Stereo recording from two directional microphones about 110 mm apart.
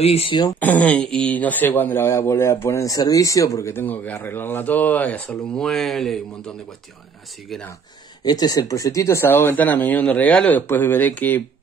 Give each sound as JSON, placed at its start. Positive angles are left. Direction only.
{"t": 0.0, "sound": "speech", "side_deg": 65}
{"t": 0.6, "sound": "speech", "side_deg": 15}
{"t": 8.2, "sound": "speech", "side_deg": 35}